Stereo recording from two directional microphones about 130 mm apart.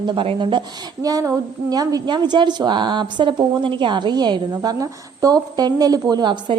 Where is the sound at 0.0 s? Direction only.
35° right (ahead or behind).